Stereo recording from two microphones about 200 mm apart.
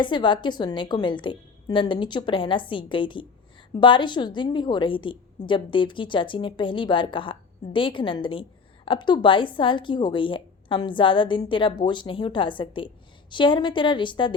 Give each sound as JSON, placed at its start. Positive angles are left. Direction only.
{"t": 0.0, "sound": "a woman's voice", "side_deg": 25}